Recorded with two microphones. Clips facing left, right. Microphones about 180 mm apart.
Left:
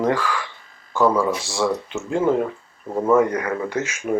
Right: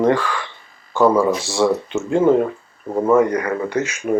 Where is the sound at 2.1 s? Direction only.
25° right (ahead or behind).